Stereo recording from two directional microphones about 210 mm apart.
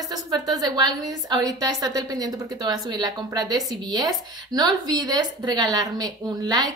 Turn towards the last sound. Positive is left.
turn(degrees=-20)  # may be behind; listen again after turning